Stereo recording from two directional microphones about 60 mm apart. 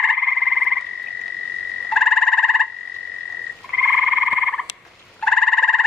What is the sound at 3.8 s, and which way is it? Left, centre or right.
Frog, centre.